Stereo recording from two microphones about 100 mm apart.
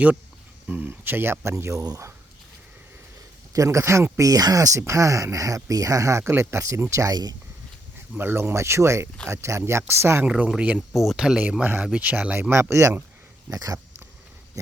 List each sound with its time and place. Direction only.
0.7 s speech: 20° right (ahead or behind)
3.5 s speech: 30° right (ahead or behind)
8.2 s speech: 25° right (ahead or behind)
10.2 s speech: 10° right (ahead or behind)
10.8 s speech: centre (ahead or behind)
11.6 s speech: 15° right (ahead or behind); by 13.7 s 35° right (ahead or behind)